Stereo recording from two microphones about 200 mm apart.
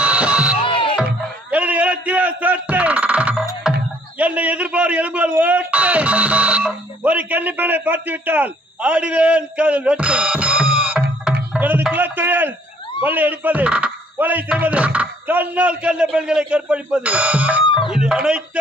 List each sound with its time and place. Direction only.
0.0 s a sound: 5° right (ahead or behind)
0.7 s music: 25° left (ahead or behind)
1.5 s music: 5° right (ahead or behind)
4.2 s a man's voice: 5° right (ahead or behind)